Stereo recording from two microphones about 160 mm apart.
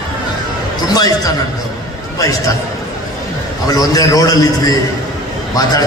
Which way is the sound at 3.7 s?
25° left (ahead or behind).